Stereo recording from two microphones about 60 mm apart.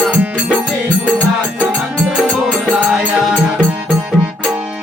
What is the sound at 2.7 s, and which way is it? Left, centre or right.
Music, centre.